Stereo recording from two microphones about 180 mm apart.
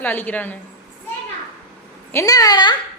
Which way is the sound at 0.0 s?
10° left (ahead or behind).